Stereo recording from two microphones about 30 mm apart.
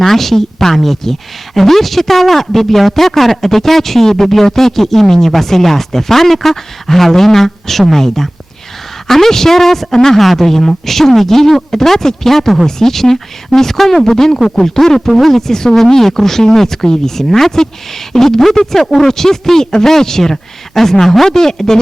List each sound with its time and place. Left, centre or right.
0.0 s a man's voice: centre